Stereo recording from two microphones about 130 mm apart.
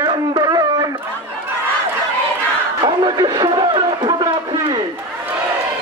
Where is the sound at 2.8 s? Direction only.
30° right (ahead or behind).